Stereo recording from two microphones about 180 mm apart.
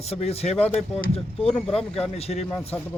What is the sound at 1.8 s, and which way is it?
Speech, 35° left (ahead or behind).